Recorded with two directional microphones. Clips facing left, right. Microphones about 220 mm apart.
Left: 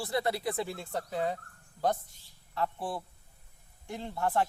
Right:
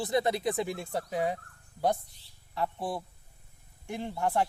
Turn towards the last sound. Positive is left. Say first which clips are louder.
# right 1 dB
turn(degrees=-15)  # may be behind; listen again after turning